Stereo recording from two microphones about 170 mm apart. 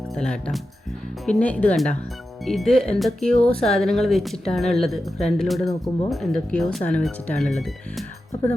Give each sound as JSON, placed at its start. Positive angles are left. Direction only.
{"t": 0.1, "sound": "speech", "side_deg": 5}